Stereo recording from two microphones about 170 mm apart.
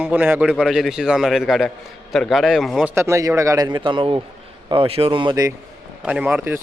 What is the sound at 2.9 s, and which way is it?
A man's voice, 15° right (ahead or behind).